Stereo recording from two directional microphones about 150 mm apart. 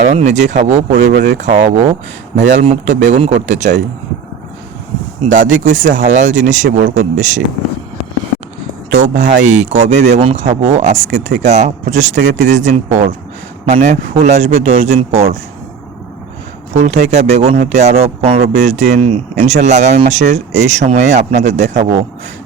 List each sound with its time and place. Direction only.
0.0 s speech: 50° right (ahead or behind)
1.0 s speech: 60° right (ahead or behind)
5.3 s speech: 60° right (ahead or behind)
8.9 s speech: 55° right (ahead or behind)
16.7 s speech: 50° right (ahead or behind)